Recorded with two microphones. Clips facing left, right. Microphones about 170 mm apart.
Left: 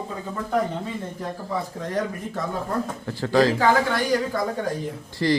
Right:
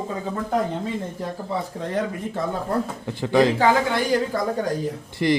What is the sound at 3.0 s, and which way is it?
Speech, 20° right (ahead or behind).